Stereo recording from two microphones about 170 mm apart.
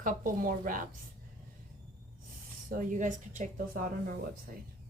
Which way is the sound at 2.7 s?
50° right (ahead or behind).